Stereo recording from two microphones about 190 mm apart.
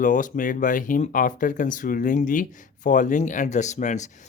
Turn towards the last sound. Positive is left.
turn(degrees=40)  # may be behind; listen again after turning